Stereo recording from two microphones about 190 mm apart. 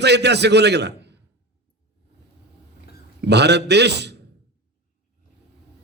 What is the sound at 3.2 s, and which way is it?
Speech, 60° right (ahead or behind).